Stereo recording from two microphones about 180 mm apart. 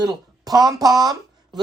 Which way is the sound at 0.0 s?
20° right (ahead or behind).